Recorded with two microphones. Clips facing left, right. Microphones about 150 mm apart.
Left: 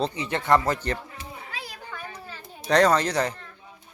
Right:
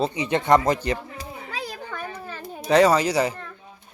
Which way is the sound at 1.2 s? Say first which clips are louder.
Right 5 dB; 40° right (ahead or behind).